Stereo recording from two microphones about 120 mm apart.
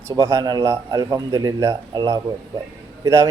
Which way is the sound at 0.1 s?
25° right (ahead or behind).